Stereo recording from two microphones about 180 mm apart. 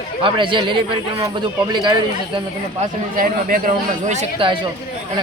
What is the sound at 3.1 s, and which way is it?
Speech, 50° right (ahead or behind).